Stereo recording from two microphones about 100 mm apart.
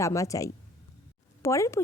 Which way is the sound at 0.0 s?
30° left (ahead or behind).